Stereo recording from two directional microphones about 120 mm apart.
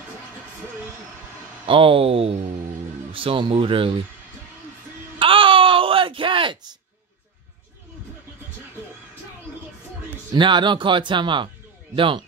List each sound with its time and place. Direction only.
1.7 s speech: 50° right (ahead or behind)
5.2 s a sound: 45° right (ahead or behind)
10.3 s speech: 40° right (ahead or behind)